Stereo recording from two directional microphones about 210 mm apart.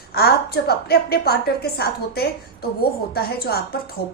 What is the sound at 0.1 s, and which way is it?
A woman's voice, 50° left (ahead or behind).